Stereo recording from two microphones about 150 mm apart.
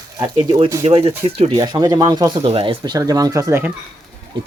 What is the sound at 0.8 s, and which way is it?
Speech, 40° right (ahead or behind).